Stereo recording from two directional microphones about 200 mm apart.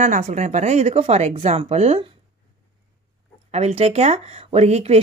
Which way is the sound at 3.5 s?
30° right (ahead or behind).